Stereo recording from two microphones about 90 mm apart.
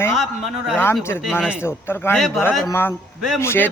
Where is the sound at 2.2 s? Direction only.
Centre (ahead or behind).